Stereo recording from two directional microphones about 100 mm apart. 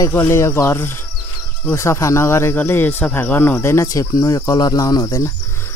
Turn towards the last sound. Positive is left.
turn(degrees=35)  # may be behind; listen again after turning